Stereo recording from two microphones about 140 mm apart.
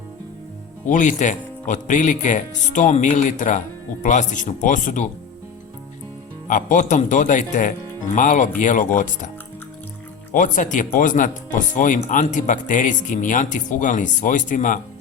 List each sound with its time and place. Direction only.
0.9 s speech: 60° left (ahead or behind)
6.5 s speech: 65° left (ahead or behind)
10.3 s speech: 70° left (ahead or behind)